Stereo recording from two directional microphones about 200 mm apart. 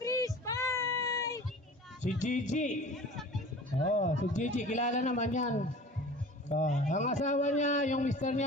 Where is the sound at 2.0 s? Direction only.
40° left (ahead or behind).